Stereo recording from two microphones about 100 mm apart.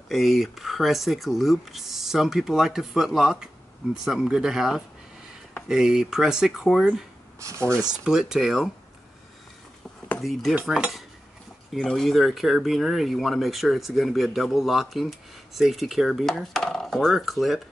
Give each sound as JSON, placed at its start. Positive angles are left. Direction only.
{"t": 0.1, "sound": "speech", "side_deg": 0}
{"t": 7.3, "sound": "speech", "side_deg": -30}
{"t": 8.0, "sound": "speech", "side_deg": -5}
{"t": 10.5, "sound": "cutlery", "side_deg": -10}
{"t": 11.7, "sound": "speech", "side_deg": 5}